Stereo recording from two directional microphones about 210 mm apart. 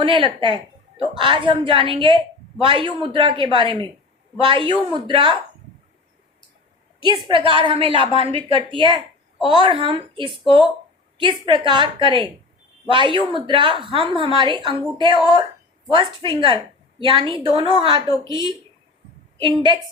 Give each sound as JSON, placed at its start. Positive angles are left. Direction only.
{"t": 0.0, "sound": "a woman's voice", "side_deg": -25}
{"t": 7.3, "sound": "a woman's voice", "side_deg": -25}